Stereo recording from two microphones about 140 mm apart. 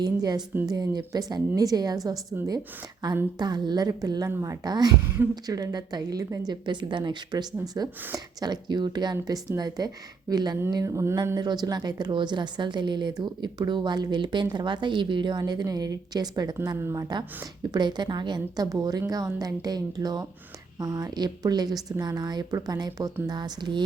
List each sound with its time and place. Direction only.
0.0 s a woman's voice: 30° right (ahead or behind)
3.3 s a woman's voice: 30° right (ahead or behind)